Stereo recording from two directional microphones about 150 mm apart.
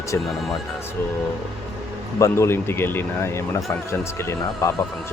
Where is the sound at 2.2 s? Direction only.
15° left (ahead or behind).